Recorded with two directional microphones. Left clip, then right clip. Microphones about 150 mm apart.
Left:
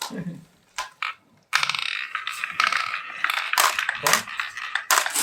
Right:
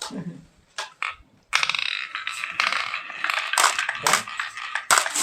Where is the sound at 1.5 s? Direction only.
15° right (ahead or behind).